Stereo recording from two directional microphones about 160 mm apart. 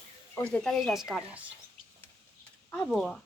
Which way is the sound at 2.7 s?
5° left (ahead or behind).